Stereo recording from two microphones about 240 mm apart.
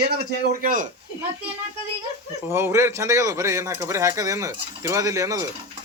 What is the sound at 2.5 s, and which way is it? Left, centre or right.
Speech, centre.